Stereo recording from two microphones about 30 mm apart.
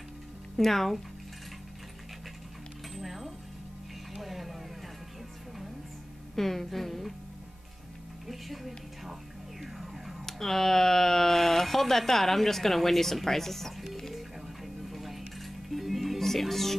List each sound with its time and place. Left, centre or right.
0.6 s speech: centre
3.0 s music: centre
4.1 s a sound: centre
6.3 s speech: centre
8.3 s music: centre
10.2 s speech: centre
14.1 s music: centre
16.2 s speech: centre